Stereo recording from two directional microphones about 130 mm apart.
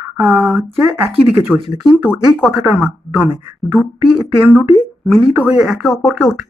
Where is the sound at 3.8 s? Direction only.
10° left (ahead or behind).